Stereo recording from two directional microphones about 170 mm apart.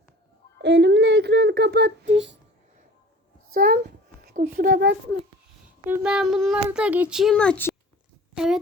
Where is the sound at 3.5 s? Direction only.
55° right (ahead or behind).